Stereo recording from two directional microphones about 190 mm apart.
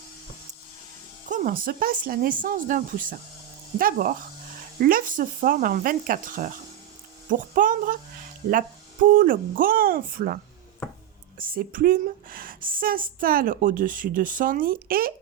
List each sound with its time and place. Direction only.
1.3 s speech: 50° right (ahead or behind)
9.1 s speech: 45° right (ahead or behind)
11.3 s speech: 50° right (ahead or behind)